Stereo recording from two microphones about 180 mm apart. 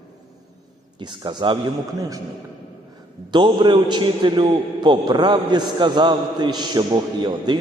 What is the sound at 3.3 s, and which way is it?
A man's voice, 25° right (ahead or behind).